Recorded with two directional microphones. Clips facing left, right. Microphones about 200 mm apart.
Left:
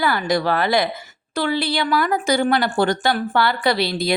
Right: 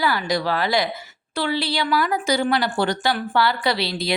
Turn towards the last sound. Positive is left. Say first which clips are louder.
# left 3 dB
turn(degrees=50)  # may be behind; listen again after turning